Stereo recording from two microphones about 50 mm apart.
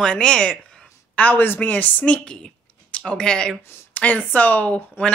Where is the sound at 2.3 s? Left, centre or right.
Centre.